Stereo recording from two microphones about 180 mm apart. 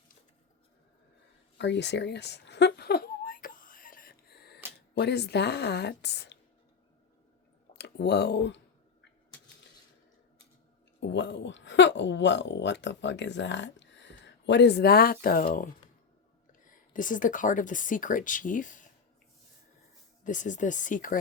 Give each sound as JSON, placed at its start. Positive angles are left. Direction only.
{"t": 1.5, "sound": "a sound", "side_deg": 75}
{"t": 7.8, "sound": "speech", "side_deg": 70}
{"t": 11.0, "sound": "speech", "side_deg": 80}
{"t": 20.2, "sound": "speech", "side_deg": 45}